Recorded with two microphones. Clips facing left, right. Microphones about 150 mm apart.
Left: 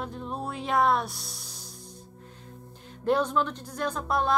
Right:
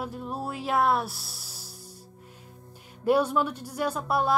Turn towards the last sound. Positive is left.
turn(degrees=-5)  # may be behind; listen again after turning